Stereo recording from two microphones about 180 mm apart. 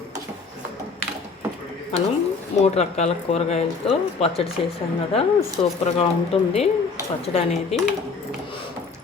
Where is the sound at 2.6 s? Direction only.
35° left (ahead or behind).